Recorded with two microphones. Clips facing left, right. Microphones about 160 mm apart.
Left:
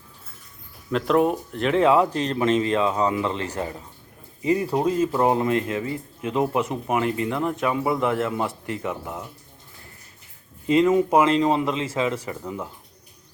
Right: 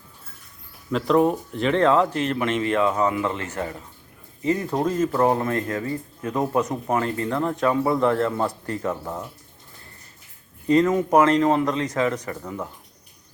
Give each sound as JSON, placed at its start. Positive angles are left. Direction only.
{"t": 0.9, "sound": "speech", "side_deg": 0}
{"t": 2.1, "sound": "speech", "side_deg": 30}
{"t": 10.7, "sound": "speech", "side_deg": 20}
{"t": 12.2, "sound": "speech", "side_deg": 10}